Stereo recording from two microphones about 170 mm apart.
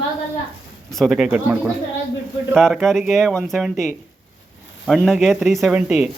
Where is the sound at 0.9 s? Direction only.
Centre (ahead or behind).